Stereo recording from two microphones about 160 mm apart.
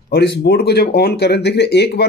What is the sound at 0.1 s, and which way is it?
Speech, 75° left (ahead or behind).